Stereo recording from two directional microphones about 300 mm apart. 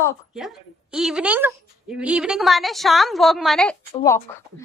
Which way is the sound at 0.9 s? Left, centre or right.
Centre.